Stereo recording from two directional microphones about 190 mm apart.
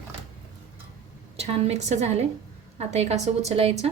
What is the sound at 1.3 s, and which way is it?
A woman's voice, 35° right (ahead or behind).